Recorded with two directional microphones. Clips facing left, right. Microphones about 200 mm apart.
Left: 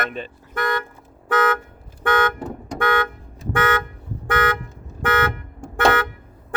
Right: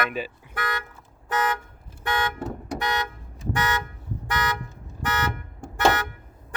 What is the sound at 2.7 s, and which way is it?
Car, 55° left (ahead or behind).